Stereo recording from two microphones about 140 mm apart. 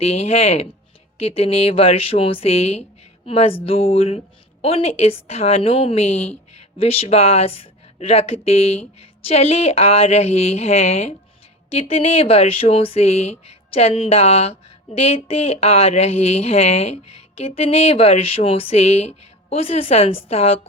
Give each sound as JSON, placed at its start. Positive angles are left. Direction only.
{"t": 0.0, "sound": "a woman's voice", "side_deg": 45}